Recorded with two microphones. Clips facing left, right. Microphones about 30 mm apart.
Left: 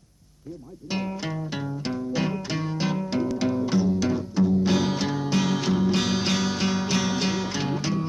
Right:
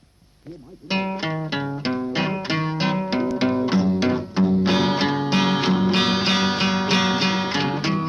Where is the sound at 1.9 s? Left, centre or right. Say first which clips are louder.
Right 3 dB; right.